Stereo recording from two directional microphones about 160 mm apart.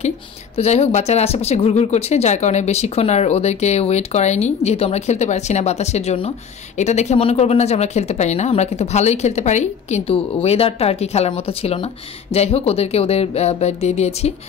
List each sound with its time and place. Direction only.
0.6 s speech: 45° left (ahead or behind)